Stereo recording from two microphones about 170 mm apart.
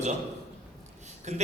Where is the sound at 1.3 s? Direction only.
40° right (ahead or behind).